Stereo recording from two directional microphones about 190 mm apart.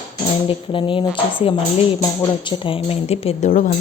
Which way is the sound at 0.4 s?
25° left (ahead or behind).